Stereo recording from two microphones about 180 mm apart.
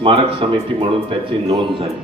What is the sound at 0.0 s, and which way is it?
Speech, 30° right (ahead or behind).